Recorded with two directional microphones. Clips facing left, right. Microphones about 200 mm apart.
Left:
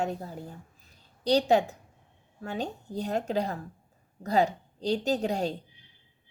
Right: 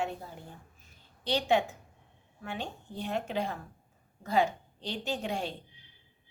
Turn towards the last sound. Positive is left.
turn(degrees=40)  # may be behind; listen again after turning